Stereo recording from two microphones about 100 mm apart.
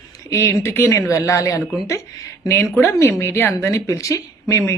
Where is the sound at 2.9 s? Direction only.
25° left (ahead or behind).